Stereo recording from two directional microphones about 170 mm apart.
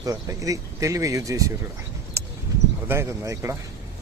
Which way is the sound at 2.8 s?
15° right (ahead or behind).